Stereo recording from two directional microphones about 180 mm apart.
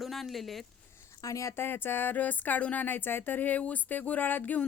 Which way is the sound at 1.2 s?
15° left (ahead or behind).